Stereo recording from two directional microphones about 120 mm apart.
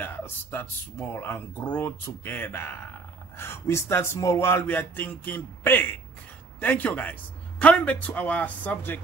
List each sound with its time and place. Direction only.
0.0 s a man's voice: 20° left (ahead or behind)